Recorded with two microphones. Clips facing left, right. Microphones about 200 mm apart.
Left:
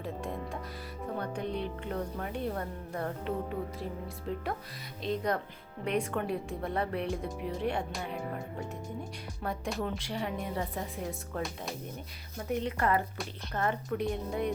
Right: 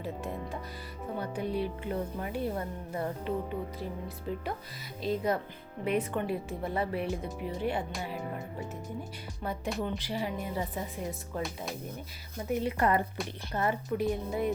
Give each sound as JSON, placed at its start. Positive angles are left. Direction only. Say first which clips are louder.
{"t": 0.0, "sound": "speech", "louder": "even", "side_deg": -5}
{"t": 5.0, "sound": "speech", "louder": "right 2 dB", "side_deg": -5}